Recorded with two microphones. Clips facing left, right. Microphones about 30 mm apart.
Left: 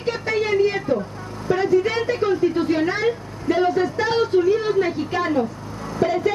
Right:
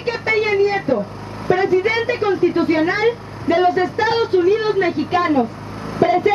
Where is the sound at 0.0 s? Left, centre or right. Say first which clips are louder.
Right 4 dB; right.